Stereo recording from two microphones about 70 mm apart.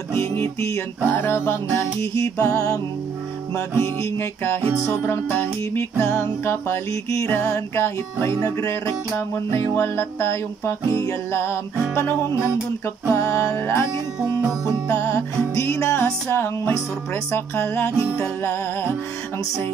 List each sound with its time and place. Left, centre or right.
0.1 s music: left
3.5 s music: left
6.9 s music: left
9.5 s music: left
14.9 s music: left